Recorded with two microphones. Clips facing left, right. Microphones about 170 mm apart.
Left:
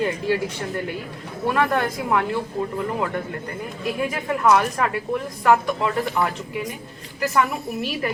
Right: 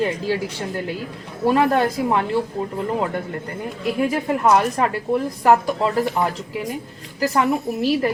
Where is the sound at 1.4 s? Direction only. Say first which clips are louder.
Right 4 dB; 25° right (ahead or behind).